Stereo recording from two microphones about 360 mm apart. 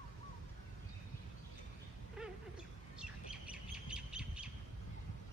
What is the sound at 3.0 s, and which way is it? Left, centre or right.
Bird, centre.